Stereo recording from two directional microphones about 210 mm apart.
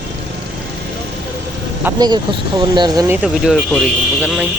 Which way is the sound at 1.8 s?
20° right (ahead or behind).